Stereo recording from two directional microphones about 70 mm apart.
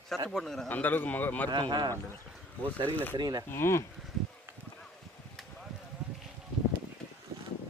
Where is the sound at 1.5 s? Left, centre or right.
Right.